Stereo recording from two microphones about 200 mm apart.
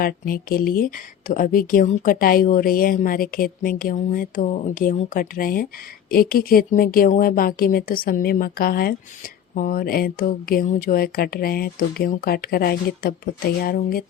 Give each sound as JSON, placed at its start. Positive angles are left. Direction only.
{"t": 0.0, "sound": "speech", "side_deg": 45}